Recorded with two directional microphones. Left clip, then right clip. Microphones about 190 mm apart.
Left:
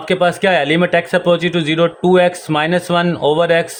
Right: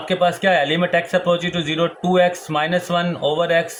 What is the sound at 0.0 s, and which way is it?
A man's voice, 50° left (ahead or behind).